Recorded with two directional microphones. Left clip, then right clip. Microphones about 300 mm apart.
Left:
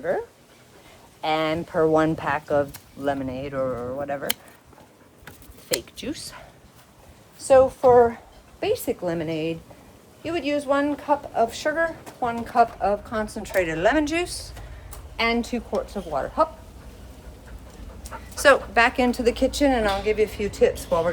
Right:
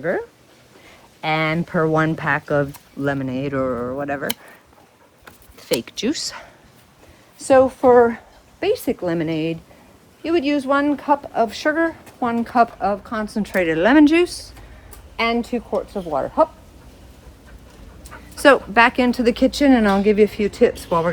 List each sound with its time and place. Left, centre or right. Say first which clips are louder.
0.0 s speech: right 3 dB; right
5.8 s a woman's voice: right 10 dB; right
18.3 s speech: right 4 dB; centre